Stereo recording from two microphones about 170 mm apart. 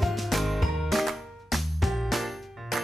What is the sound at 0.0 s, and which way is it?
Music, centre (ahead or behind).